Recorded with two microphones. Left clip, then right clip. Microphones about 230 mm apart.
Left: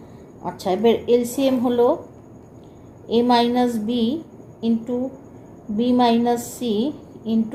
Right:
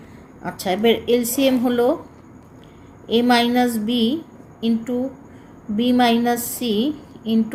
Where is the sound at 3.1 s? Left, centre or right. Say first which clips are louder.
Even; right.